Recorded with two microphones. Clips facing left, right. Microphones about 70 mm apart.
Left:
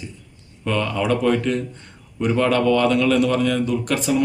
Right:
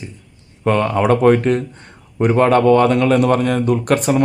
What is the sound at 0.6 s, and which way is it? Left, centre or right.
A man's voice, right.